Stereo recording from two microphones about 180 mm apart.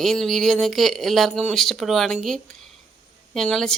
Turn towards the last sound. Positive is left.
turn(degrees=5)  # may be behind; listen again after turning